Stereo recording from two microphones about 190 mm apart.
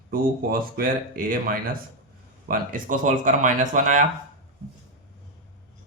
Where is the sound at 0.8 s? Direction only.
50° right (ahead or behind).